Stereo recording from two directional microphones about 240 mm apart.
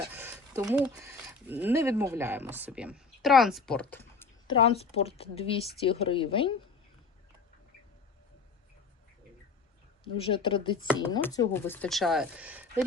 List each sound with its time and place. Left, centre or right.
0.1 s speech: centre
4.4 s a woman's voice: left
10.2 s a woman's voice: left; by 12.8 s centre